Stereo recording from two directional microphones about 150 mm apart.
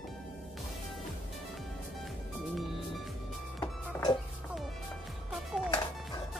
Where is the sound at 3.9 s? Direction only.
20° left (ahead or behind).